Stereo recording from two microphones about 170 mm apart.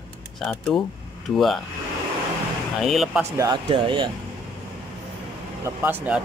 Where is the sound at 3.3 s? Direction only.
25° right (ahead or behind).